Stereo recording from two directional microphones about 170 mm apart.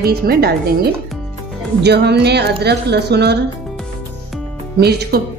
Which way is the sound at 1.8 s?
80° right.